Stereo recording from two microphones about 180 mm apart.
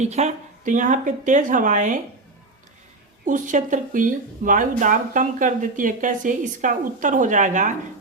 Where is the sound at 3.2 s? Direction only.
45° right (ahead or behind).